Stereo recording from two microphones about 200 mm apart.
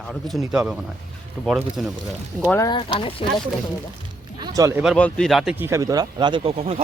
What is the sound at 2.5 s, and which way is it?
Speech, 20° left (ahead or behind).